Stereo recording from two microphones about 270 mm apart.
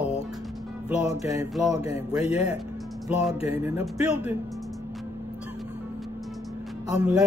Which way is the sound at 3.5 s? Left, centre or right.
Centre.